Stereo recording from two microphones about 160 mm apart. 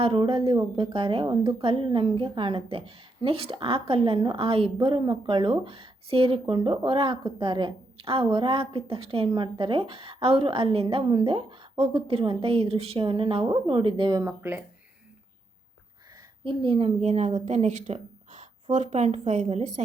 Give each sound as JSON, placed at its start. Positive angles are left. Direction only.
{"t": 0.0, "sound": "a woman's voice", "side_deg": -35}
{"t": 16.4, "sound": "a woman's voice", "side_deg": -30}